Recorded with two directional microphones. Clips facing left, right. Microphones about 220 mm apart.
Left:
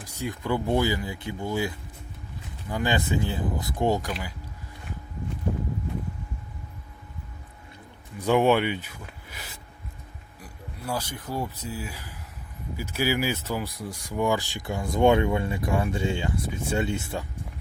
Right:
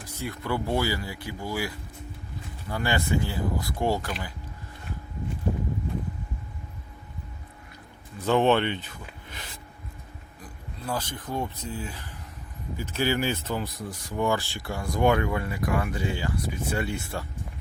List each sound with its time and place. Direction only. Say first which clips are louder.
0.0 s speech: left 2 dB; 15° left (ahead or behind)
8.2 s speech: left 1 dB; 10° left (ahead or behind)